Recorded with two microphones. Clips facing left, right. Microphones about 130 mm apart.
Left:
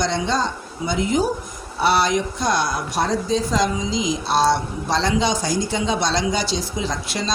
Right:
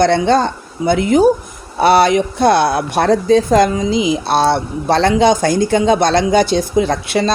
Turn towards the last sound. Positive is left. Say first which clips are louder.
# right 11 dB
turn(degrees=-60)  # may be behind; listen again after turning